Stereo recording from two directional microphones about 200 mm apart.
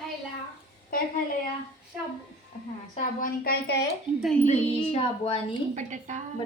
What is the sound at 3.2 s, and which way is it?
Speech, 50° left (ahead or behind).